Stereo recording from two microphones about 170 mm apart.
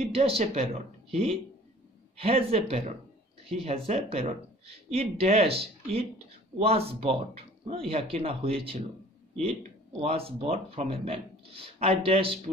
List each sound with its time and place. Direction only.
0.0 s speech: 35° right (ahead or behind)
2.1 s speech: 35° right (ahead or behind)